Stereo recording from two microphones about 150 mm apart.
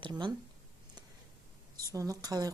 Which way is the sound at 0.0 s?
30° right (ahead or behind).